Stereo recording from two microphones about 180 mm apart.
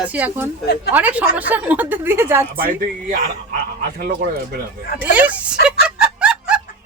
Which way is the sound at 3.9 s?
60° right (ahead or behind).